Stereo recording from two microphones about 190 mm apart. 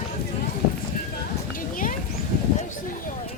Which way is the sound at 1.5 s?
45° left (ahead or behind).